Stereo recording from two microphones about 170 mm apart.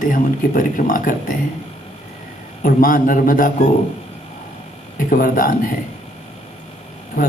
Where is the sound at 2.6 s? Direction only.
55° left (ahead or behind).